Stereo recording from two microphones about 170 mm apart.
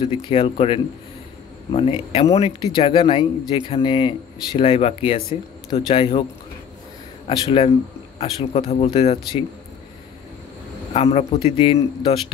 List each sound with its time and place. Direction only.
0.0 s speech: 30° left (ahead or behind)
7.2 s speech: 35° left (ahead or behind)
8.6 s speech: 40° left (ahead or behind)
10.9 s speech: 35° left (ahead or behind)